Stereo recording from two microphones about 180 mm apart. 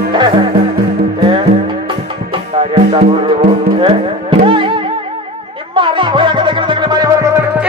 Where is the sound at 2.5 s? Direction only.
35° right (ahead or behind).